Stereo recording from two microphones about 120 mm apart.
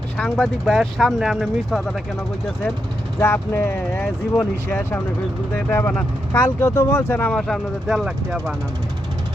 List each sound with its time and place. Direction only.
0.2 s speech: 5° left (ahead or behind)
3.2 s speech: 20° left (ahead or behind); by 8.5 s centre (ahead or behind)